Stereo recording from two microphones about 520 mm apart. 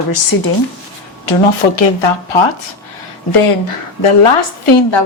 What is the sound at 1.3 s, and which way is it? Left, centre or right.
Speech, left.